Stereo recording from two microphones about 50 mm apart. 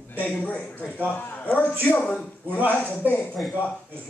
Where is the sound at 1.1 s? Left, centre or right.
Left.